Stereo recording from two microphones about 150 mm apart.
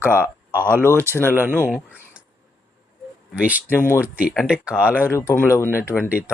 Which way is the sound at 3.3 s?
10° right (ahead or behind).